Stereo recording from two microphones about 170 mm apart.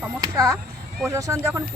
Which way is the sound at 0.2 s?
20° right (ahead or behind).